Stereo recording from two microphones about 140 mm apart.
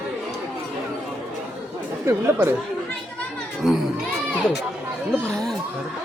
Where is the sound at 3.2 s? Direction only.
Centre (ahead or behind).